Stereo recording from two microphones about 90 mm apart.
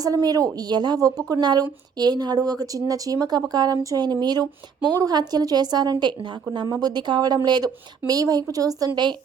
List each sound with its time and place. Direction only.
0.0 s a woman's voice: 45° right (ahead or behind)